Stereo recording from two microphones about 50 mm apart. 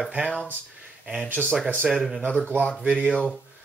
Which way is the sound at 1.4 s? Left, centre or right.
Left.